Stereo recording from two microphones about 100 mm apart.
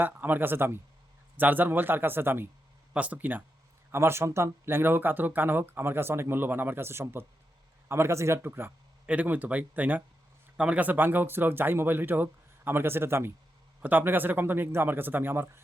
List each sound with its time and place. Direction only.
0.0 s speech: 20° right (ahead or behind)